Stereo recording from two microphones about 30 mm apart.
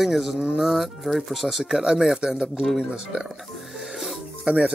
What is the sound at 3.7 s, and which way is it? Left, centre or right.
Music, centre.